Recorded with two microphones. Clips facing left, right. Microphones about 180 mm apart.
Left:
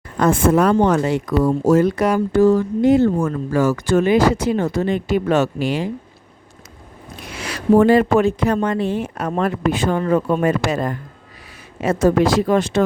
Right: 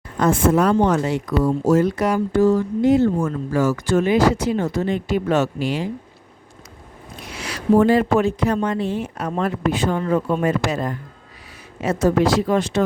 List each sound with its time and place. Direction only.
0.2 s speech: 60° left (ahead or behind)
7.3 s speech: 60° left (ahead or behind)